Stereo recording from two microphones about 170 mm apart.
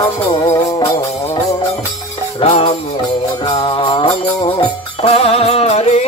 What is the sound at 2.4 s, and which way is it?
Music, 35° left (ahead or behind).